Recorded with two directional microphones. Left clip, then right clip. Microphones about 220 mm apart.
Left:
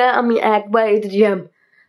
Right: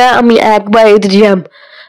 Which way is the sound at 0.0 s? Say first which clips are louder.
Right 8 dB; 45° right (ahead or behind).